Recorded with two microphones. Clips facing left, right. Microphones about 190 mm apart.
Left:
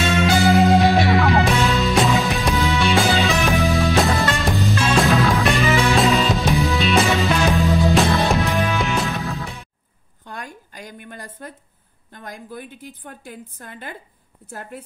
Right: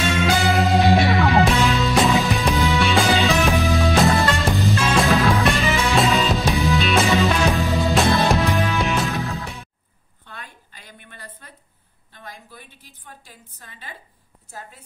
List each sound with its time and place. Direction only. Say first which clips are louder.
0.5 s music: left 3 dB; centre (ahead or behind)
10.2 s a sound: left 7 dB; 45° left (ahead or behind)
14.5 s a woman's voice: left 6 dB; 60° left (ahead or behind)